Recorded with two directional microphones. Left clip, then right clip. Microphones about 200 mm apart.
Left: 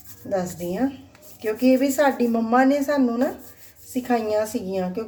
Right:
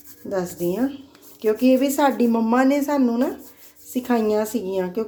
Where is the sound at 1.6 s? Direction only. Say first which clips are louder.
Left 1 dB; 35° right (ahead or behind).